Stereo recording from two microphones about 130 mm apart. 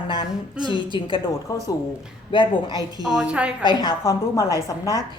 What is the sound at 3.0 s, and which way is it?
Speech, 5° right (ahead or behind).